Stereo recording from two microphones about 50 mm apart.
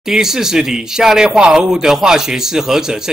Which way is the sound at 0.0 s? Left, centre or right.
Centre.